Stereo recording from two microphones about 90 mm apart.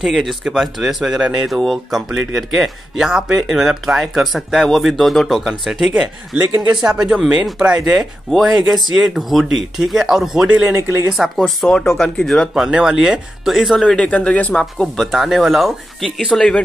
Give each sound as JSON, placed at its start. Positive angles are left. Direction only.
{"t": 0.0, "sound": "speech", "side_deg": 0}
{"t": 10.5, "sound": "speech", "side_deg": -20}
{"t": 11.1, "sound": "speech", "side_deg": 0}
{"t": 12.5, "sound": "speech", "side_deg": -10}
{"t": 16.3, "sound": "speech", "side_deg": 10}